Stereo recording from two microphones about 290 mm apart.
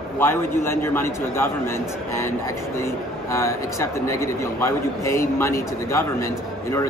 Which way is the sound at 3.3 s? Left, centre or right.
Centre.